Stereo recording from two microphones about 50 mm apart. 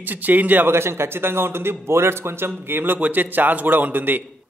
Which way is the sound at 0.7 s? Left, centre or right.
Right.